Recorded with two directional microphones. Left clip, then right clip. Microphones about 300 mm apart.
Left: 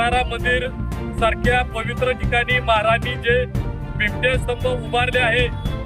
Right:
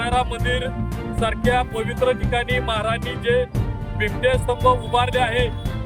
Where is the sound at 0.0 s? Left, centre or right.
Centre.